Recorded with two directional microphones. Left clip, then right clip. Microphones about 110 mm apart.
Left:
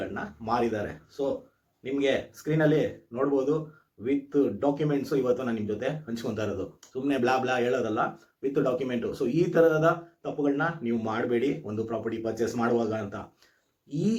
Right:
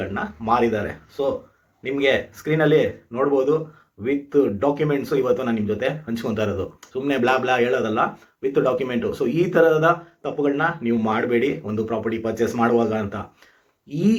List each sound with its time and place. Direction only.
0.0 s speech: 20° right (ahead or behind)